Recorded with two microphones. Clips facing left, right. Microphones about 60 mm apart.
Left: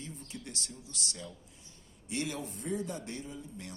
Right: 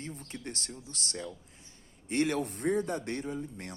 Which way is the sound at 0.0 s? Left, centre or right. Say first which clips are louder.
Right 4 dB; right.